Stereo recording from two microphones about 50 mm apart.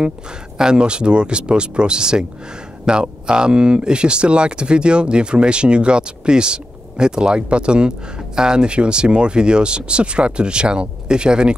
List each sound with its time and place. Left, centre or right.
0.6 s speech: centre